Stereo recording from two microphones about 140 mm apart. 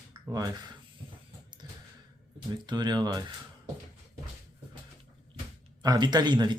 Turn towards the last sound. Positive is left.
turn(degrees=-30)  # may be behind; listen again after turning